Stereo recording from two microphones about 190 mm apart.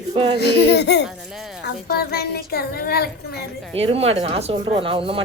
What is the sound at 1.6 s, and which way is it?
A child's voice, 55° left (ahead or behind).